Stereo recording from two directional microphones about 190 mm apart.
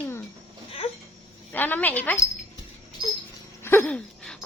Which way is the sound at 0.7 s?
30° left (ahead or behind).